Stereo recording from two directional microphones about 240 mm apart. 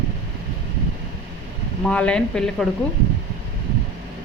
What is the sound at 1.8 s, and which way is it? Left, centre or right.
Speech, centre.